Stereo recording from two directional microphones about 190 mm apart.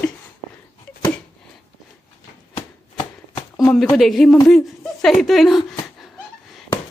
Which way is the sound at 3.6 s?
Centre (ahead or behind).